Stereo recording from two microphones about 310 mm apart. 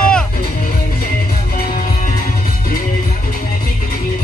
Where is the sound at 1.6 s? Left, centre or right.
Left.